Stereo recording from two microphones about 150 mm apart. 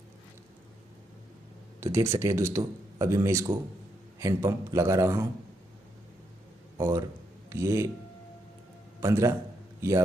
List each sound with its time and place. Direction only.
1.8 s speech: 20° right (ahead or behind)
6.8 s speech: 20° right (ahead or behind)
9.0 s a man's voice: 20° right (ahead or behind)